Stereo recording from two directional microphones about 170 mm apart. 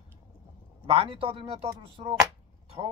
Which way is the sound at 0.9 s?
35° right (ahead or behind).